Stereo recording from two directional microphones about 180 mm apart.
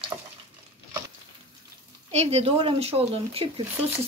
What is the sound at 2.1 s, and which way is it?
Speech, 35° right (ahead or behind).